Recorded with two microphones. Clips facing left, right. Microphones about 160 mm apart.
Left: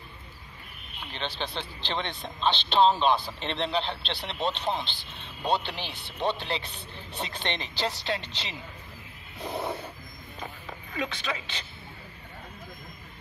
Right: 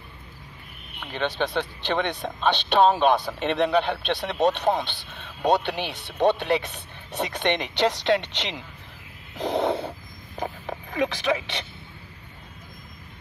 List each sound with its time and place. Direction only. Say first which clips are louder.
0.9 s speech: right 8 dB; 60° right (ahead or behind)
9.4 s snort: right 9 dB; 90° right